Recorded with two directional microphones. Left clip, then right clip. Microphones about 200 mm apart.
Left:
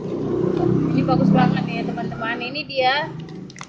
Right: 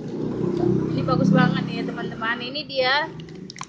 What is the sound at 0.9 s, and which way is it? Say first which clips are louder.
A woman's voice: left 3 dB; 15° right (ahead or behind).